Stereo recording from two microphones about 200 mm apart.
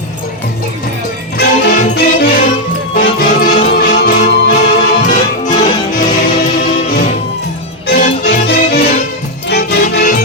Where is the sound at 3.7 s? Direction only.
50° left (ahead or behind).